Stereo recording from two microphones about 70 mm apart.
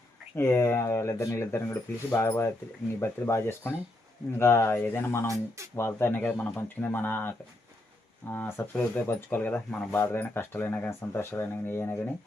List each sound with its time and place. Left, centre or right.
0.3 s speech: left
11.1 s speech: left